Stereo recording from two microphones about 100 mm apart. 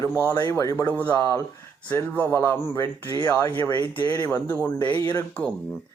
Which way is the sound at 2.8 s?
35° left (ahead or behind).